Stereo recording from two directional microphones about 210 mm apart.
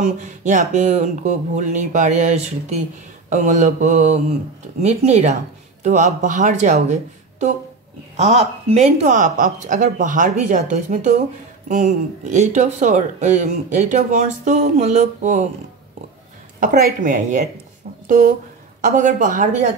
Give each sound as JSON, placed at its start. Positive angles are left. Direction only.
{"t": 0.0, "sound": "speech", "side_deg": -35}
{"t": 16.5, "sound": "speech", "side_deg": -40}